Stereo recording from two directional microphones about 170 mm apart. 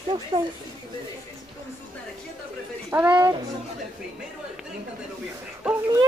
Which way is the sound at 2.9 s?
10° right (ahead or behind).